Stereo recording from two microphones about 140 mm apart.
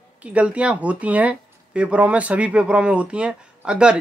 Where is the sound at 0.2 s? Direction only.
10° right (ahead or behind).